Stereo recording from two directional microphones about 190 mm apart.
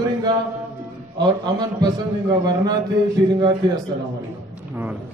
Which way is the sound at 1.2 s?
25° right (ahead or behind).